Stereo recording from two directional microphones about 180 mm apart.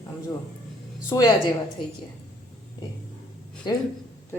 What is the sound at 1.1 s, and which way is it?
Speech, 20° left (ahead or behind).